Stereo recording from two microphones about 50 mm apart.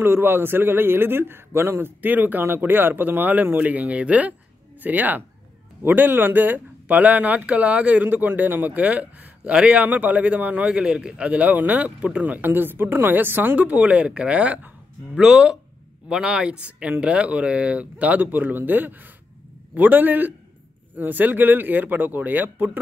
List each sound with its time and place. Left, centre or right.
0.0 s a man's voice: right
9.4 s speech: right
9.8 s speech: right
10.7 s speech: centre
12.4 s a man's voice: right
13.6 s speech: right
15.1 s speech: centre; by 22.7 s right